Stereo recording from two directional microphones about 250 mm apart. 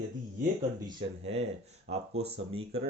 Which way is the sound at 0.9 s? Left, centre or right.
Right.